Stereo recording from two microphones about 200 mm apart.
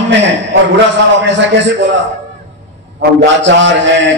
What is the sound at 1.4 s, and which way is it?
Speech, 65° right (ahead or behind).